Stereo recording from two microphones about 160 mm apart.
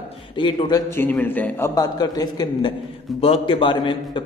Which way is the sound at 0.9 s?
10° left (ahead or behind).